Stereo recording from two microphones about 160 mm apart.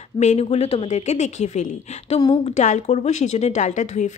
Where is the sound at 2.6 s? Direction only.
45° left (ahead or behind).